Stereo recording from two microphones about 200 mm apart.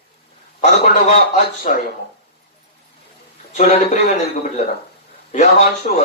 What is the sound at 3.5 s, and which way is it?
Speech, 35° left (ahead or behind).